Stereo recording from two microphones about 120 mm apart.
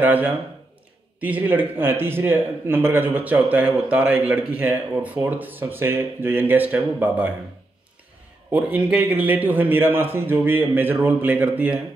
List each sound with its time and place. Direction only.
0.0 s a man's voice: 15° right (ahead or behind)
8.5 s a man's voice: 15° right (ahead or behind)